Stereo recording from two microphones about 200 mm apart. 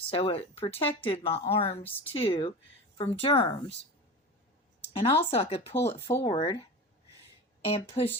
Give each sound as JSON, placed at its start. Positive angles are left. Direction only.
{"t": 0.1, "sound": "speech", "side_deg": 25}
{"t": 4.9, "sound": "speech", "side_deg": 30}
{"t": 7.6, "sound": "speech", "side_deg": 30}